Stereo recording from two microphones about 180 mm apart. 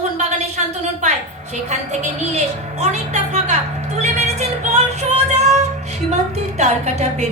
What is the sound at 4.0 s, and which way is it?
Music, 40° right (ahead or behind).